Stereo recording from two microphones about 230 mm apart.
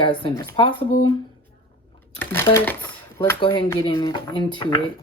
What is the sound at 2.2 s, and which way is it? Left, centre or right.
Speech, centre.